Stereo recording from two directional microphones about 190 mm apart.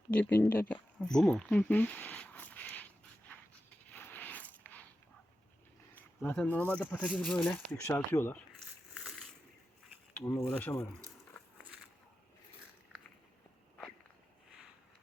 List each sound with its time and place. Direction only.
0.1 s a sound: 10° left (ahead or behind)
5.9 s speech: 10° left (ahead or behind)
9.0 s crushing: centre (ahead or behind)
10.2 s speech: 15° left (ahead or behind)